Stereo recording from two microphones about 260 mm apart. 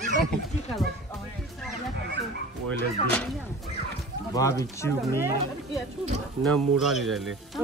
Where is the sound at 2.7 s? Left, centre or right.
Centre.